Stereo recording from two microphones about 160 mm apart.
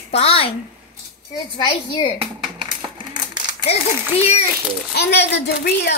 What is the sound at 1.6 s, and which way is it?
Speech, 30° left (ahead or behind).